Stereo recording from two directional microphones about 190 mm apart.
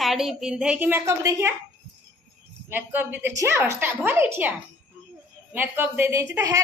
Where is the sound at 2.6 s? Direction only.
10° right (ahead or behind).